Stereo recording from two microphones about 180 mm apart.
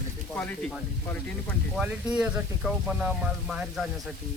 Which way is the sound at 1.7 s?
5° right (ahead or behind).